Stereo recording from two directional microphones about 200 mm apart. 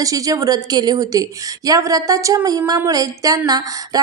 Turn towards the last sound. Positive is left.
turn(degrees=-20)  # may be behind; listen again after turning